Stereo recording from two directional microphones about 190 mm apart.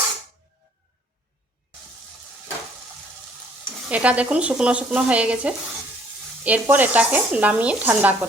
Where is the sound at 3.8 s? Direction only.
5° right (ahead or behind).